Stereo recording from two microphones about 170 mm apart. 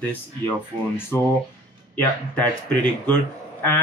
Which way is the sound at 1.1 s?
15° left (ahead or behind).